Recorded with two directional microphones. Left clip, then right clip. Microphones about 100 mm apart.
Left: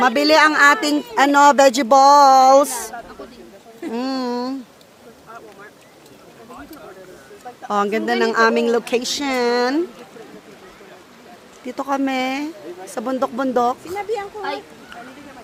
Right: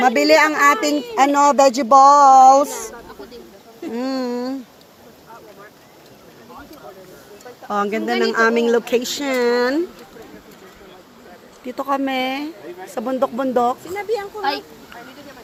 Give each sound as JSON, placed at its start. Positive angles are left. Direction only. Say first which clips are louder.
{"t": 0.0, "sound": "speech", "louder": "even", "side_deg": 20}
{"t": 3.9, "sound": "a sound", "louder": "even", "side_deg": 30}
{"t": 7.7, "sound": "speech", "louder": "left 1 dB", "side_deg": 20}
{"t": 8.1, "sound": "speech", "louder": "even", "side_deg": 5}
{"t": 11.6, "sound": "speech", "louder": "even", "side_deg": 10}